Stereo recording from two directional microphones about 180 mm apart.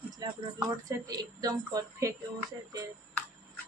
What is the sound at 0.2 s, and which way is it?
Speech, 25° right (ahead or behind).